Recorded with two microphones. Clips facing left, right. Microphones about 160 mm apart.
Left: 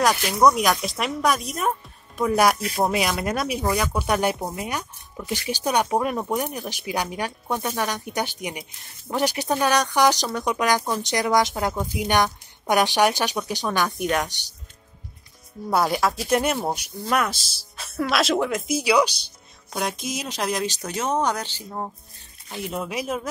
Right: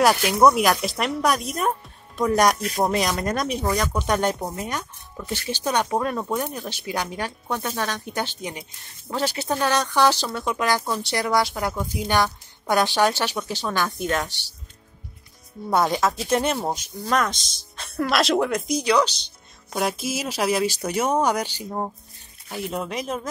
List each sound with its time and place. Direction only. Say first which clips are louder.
0.6 s speech: right 2 dB; centre (ahead or behind); by 14.5 s 15° left (ahead or behind)
15.7 s speech: right 1 dB; 5° left (ahead or behind)
19.7 s speech: right 3 dB; 5° right (ahead or behind)
22.5 s speech: right 1 dB; centre (ahead or behind)